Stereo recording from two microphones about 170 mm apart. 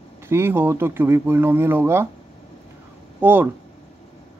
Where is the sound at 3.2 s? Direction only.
10° right (ahead or behind).